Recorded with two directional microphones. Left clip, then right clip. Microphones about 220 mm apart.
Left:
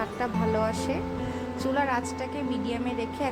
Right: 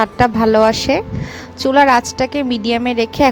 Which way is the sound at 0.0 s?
40° right (ahead or behind).